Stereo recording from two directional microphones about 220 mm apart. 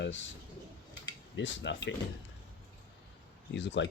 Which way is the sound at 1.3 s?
55° left (ahead or behind).